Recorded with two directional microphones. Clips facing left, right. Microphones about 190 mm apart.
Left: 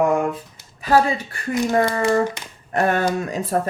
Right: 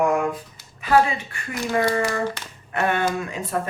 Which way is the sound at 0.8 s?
40° left (ahead or behind).